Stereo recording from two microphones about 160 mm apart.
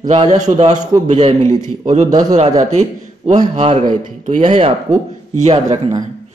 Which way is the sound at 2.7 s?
45° right (ahead or behind).